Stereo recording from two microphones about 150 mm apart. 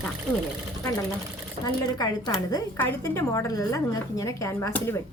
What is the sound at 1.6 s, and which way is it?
A woman's voice, 25° left (ahead or behind).